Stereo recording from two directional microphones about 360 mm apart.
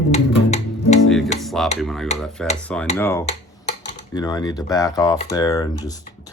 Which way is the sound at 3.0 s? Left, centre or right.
Centre.